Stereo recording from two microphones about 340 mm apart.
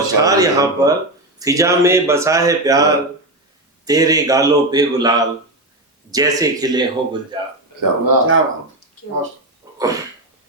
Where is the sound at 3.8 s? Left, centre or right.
Centre.